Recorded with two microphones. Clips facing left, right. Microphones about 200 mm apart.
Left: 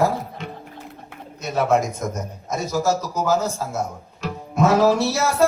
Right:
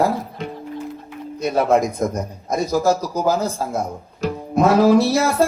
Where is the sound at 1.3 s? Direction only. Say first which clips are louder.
Right 3 dB; 35° right (ahead or behind).